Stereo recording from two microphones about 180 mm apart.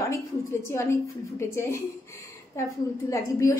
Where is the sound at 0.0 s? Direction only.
15° left (ahead or behind).